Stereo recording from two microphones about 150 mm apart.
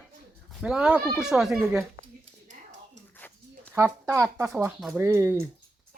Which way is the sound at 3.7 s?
20° right (ahead or behind).